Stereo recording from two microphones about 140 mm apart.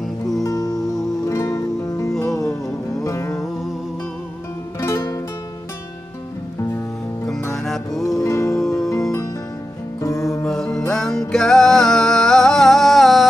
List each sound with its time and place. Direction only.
0.4 s music: 25° left (ahead or behind)
4.7 s music: 20° left (ahead or behind)
7.6 s music: centre (ahead or behind)
8.2 s music: 20° left (ahead or behind)
10.0 s music: 20° left (ahead or behind)
10.4 s music: 5° left (ahead or behind)